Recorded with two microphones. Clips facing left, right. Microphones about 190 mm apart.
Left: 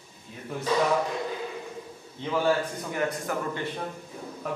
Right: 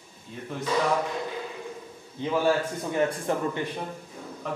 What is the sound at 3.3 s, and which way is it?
Speech, 30° right (ahead or behind).